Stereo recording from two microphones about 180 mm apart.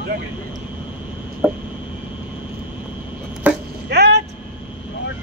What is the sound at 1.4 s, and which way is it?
Speech, 10° right (ahead or behind).